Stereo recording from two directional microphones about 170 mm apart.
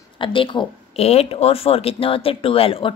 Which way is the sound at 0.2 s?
30° left (ahead or behind).